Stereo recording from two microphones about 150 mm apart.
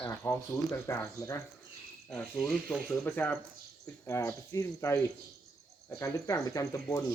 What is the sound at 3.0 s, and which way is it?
Speech, 15° left (ahead or behind).